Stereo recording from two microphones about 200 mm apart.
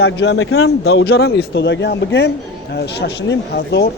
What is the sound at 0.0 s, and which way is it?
Speech, 65° left (ahead or behind).